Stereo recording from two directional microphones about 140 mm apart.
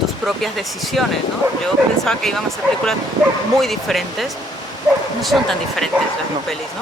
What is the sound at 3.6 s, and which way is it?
Speech, centre (ahead or behind).